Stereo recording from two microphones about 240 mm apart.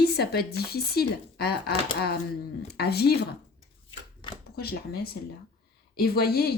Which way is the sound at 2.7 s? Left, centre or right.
Left.